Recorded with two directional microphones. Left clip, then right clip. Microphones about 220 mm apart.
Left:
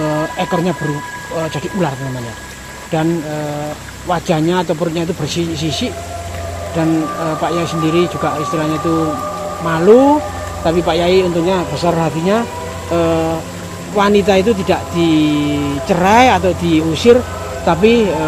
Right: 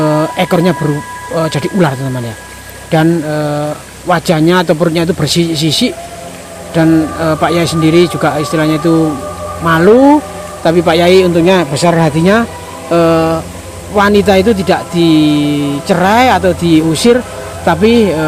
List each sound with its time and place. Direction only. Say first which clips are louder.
0.0 s speech: right 6 dB; 30° right (ahead or behind)
2.9 s speech: right 6 dB; 30° right (ahead or behind)
7.3 s speech: right 6 dB; 30° right (ahead or behind)